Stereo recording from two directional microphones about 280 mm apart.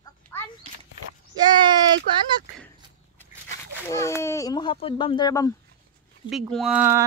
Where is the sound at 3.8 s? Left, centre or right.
Centre.